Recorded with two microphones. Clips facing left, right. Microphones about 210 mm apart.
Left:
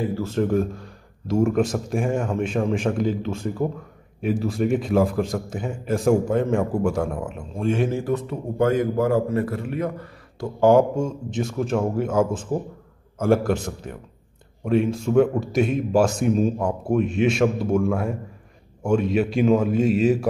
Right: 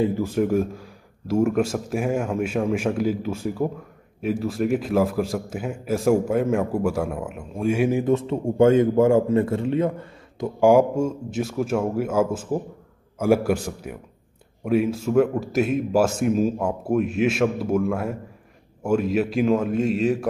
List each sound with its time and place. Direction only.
0.0 s a man's voice: 15° right (ahead or behind)
8.0 s a man's voice: 25° right (ahead or behind)
10.6 s a man's voice: 10° right (ahead or behind)